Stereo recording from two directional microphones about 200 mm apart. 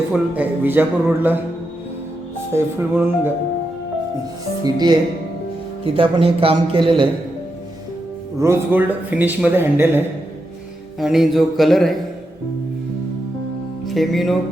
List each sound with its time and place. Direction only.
0.1 s speech: 10° right (ahead or behind)
2.5 s speech: 10° right (ahead or behind)
4.6 s a man's voice: 20° right (ahead or behind)
8.4 s speech: 10° right (ahead or behind)
11.0 s speech: centre (ahead or behind)
13.8 s speech: centre (ahead or behind)